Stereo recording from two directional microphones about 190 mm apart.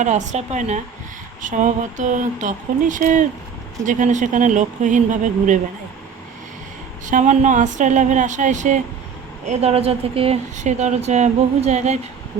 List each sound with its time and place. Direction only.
0.0 s speech: 40° right (ahead or behind)
7.0 s speech: 40° right (ahead or behind)